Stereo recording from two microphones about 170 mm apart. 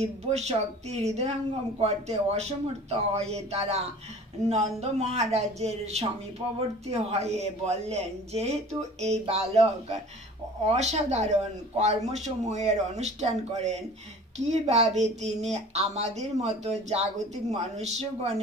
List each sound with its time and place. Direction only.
0.3 s speech: 40° right (ahead or behind)